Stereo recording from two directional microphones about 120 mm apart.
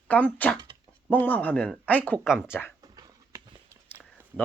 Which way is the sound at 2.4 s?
20° left (ahead or behind).